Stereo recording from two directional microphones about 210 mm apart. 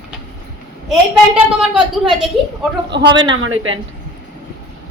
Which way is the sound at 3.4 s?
75° right (ahead or behind).